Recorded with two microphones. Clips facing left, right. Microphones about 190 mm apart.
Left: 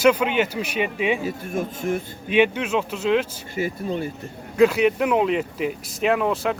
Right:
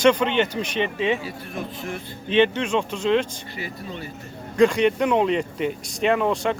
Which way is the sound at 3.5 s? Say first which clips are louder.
Left 12 dB; 45° left (ahead or behind).